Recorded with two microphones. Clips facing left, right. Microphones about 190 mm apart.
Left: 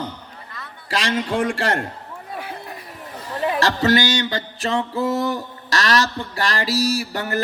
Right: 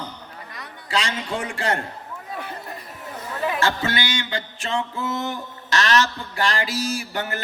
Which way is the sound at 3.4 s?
40° left (ahead or behind).